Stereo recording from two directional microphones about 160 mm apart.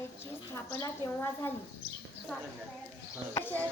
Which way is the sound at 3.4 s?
10° left (ahead or behind).